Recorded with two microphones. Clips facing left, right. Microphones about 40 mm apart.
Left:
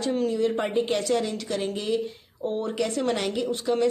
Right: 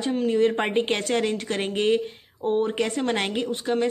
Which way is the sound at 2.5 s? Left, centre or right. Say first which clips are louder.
Right 4 dB; right.